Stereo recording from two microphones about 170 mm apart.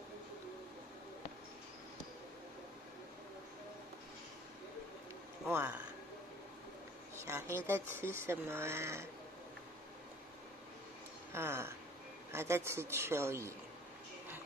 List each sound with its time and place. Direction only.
5.5 s speech: 15° right (ahead or behind)
7.2 s a sound: 15° right (ahead or behind)
7.5 s speech: 15° right (ahead or behind)
11.3 s speech: 15° right (ahead or behind)